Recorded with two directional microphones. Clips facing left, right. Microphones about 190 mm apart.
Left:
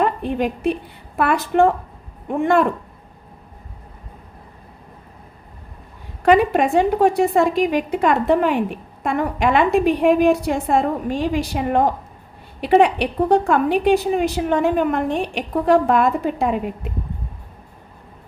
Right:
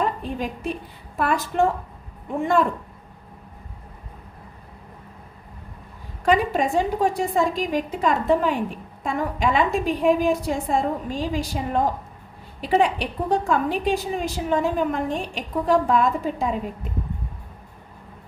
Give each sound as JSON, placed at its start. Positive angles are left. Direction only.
{"t": 0.0, "sound": "a woman's voice", "side_deg": 65}
{"t": 6.2, "sound": "a woman's voice", "side_deg": 65}